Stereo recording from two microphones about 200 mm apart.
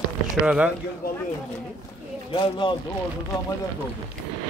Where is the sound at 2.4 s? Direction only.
25° left (ahead or behind).